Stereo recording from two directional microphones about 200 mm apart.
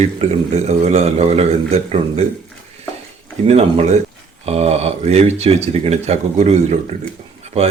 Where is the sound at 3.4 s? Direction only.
30° right (ahead or behind).